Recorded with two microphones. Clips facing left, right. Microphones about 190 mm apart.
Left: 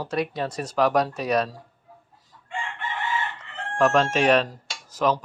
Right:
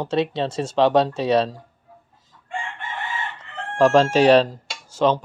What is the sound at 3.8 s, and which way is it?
Speech, 35° right (ahead or behind).